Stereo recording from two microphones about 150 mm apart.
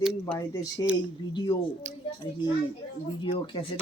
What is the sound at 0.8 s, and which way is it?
Speech, 25° left (ahead or behind).